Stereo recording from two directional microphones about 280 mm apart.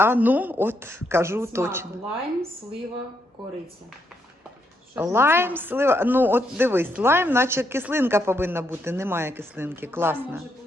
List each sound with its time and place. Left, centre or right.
0.0 s speech: centre
4.9 s speech: centre